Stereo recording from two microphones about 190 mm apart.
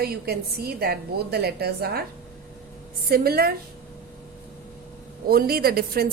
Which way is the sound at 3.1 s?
55° right (ahead or behind).